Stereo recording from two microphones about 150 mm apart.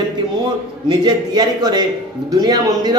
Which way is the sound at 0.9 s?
30° right (ahead or behind).